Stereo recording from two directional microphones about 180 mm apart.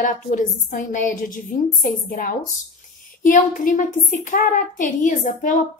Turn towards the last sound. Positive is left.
turn(degrees=45)  # may be behind; listen again after turning